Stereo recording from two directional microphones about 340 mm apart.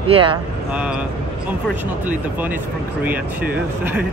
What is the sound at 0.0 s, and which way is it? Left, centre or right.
Speech, centre.